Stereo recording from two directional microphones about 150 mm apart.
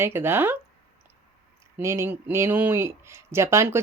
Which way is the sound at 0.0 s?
15° right (ahead or behind).